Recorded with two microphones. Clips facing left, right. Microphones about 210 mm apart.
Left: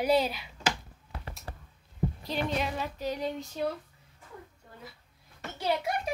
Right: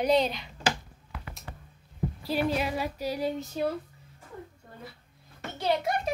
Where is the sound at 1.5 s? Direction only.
35° left (ahead or behind).